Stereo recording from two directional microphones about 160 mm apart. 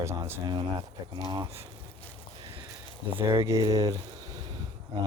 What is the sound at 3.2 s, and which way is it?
Speech, 15° right (ahead or behind).